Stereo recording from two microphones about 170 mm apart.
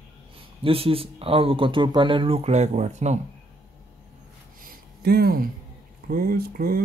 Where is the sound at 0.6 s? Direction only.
35° right (ahead or behind).